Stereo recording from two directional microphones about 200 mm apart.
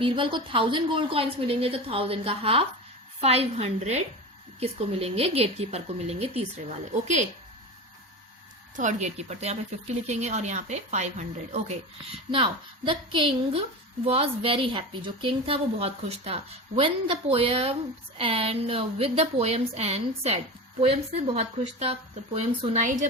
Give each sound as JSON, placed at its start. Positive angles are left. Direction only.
{"t": 0.0, "sound": "a woman's voice", "side_deg": -25}
{"t": 8.7, "sound": "a woman's voice", "side_deg": -40}